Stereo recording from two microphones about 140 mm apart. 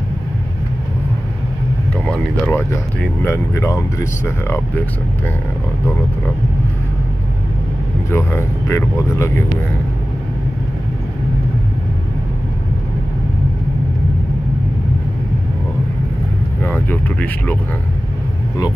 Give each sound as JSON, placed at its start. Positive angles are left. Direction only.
{"t": 2.0, "sound": "speech", "side_deg": 15}
{"t": 8.1, "sound": "speech", "side_deg": 15}
{"t": 16.6, "sound": "speech", "side_deg": 10}